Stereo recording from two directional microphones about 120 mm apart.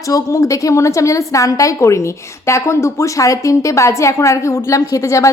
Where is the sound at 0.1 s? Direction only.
25° left (ahead or behind).